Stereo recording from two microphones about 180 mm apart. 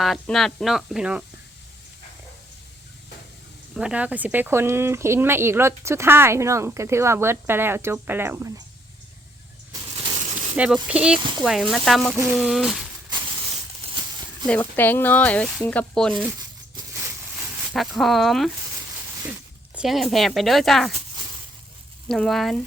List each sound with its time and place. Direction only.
0.0 s speech: centre (ahead or behind)
3.8 s speech: 5° right (ahead or behind)
10.8 s speech: 5° right (ahead or behind)
13.1 s a sound: 25° right (ahead or behind)
14.4 s speech: 10° left (ahead or behind)
17.7 s speech: centre (ahead or behind)
22.1 s speech: centre (ahead or behind)